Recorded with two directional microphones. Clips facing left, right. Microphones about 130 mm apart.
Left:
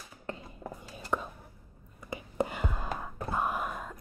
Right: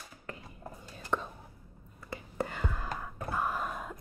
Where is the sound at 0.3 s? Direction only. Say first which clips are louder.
Left 5 dB; 25° left (ahead or behind).